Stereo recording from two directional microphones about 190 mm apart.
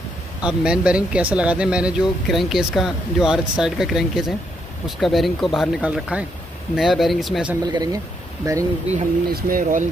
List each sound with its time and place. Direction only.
0.4 s speech: 5° right (ahead or behind)
7.6 s speech: 20° right (ahead or behind)
9.3 s speech: 45° right (ahead or behind)